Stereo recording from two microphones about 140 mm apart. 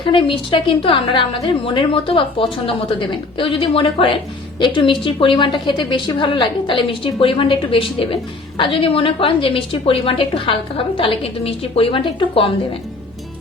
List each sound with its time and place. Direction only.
0.0 s a woman's voice: 35° left (ahead or behind)